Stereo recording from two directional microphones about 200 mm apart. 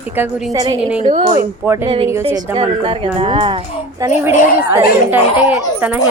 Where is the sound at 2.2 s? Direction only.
25° right (ahead or behind).